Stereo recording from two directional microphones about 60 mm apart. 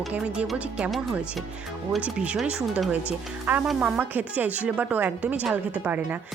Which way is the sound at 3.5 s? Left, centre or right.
Right.